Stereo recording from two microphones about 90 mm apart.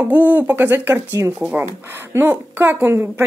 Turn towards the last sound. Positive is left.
turn(degrees=-25)  # may be behind; listen again after turning